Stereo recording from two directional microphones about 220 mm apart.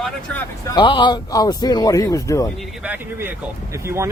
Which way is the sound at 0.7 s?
20° left (ahead or behind).